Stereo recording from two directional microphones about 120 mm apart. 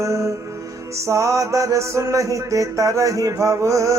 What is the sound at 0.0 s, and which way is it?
Music, 25° right (ahead or behind).